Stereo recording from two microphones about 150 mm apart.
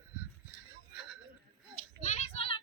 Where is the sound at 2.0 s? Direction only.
50° left (ahead or behind).